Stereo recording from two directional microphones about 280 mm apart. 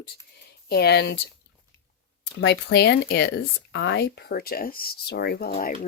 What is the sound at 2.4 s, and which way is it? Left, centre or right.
Speech, left.